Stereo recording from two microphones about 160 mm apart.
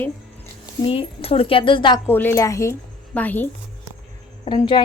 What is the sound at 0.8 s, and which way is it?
Speech, 35° left (ahead or behind).